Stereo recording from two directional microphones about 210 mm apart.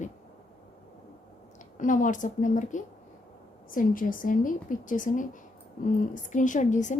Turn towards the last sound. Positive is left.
turn(degrees=35)  # may be behind; listen again after turning